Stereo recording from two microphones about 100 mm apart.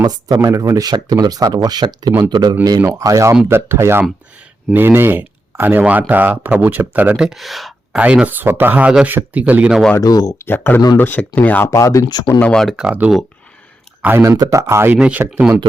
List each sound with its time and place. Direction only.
0.4 s speech: 35° right (ahead or behind); by 7.2 s 15° right (ahead or behind)
7.2 s speech: centre (ahead or behind)
7.9 s speech: 10° right (ahead or behind)
10.0 s speech: 40° left (ahead or behind)
10.3 s speech: 20° left (ahead or behind)
11.7 s speech: 30° left (ahead or behind)
12.0 s speech: 45° left (ahead or behind)
12.4 s speech: 10° left (ahead or behind)
12.8 s speech: 15° right (ahead or behind)
14.2 s speech: 35° right (ahead or behind)
14.9 s speech: 10° right (ahead or behind)